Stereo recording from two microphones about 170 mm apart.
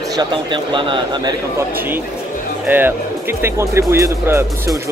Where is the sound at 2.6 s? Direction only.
10° right (ahead or behind).